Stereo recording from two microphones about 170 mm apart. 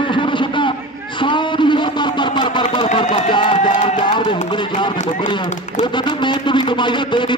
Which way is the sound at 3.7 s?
45° left (ahead or behind).